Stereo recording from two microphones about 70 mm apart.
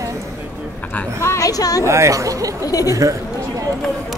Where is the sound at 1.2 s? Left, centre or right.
Left.